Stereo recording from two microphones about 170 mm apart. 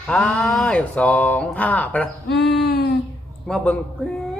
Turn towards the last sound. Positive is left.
turn(degrees=5)  # may be behind; listen again after turning